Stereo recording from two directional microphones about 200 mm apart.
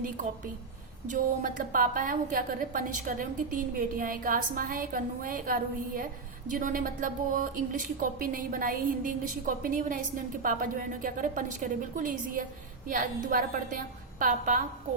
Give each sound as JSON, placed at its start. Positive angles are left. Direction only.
{"t": 1.0, "sound": "a woman's voice", "side_deg": -40}